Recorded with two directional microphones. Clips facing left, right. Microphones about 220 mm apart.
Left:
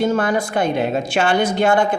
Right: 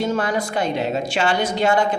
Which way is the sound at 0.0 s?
55° left (ahead or behind).